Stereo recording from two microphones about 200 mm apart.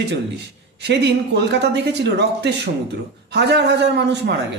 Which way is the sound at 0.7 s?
55° right (ahead or behind).